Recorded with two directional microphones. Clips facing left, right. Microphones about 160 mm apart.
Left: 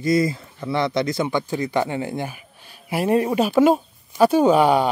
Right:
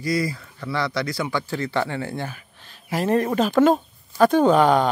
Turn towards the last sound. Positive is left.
turn(degrees=10)  # may be behind; listen again after turning